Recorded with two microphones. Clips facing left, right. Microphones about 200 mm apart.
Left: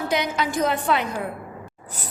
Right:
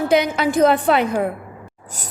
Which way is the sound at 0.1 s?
60° right (ahead or behind).